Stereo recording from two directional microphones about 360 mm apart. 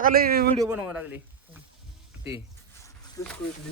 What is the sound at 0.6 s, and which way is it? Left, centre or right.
Speech, centre.